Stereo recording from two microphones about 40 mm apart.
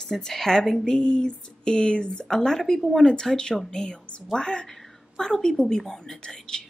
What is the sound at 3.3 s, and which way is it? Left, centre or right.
Speech, centre.